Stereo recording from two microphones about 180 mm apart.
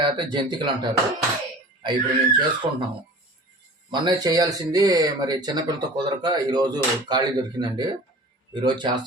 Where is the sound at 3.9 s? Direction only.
25° right (ahead or behind).